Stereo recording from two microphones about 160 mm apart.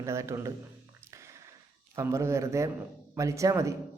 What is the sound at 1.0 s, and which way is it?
Music, 15° right (ahead or behind).